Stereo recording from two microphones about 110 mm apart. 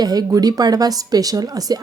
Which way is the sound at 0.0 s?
35° right (ahead or behind).